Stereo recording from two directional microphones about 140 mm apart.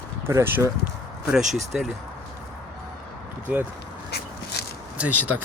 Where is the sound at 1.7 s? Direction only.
Centre (ahead or behind).